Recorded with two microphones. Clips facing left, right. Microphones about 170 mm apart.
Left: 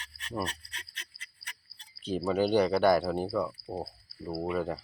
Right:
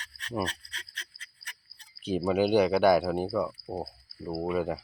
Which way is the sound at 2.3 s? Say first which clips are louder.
Right 2 dB; 5° right (ahead or behind).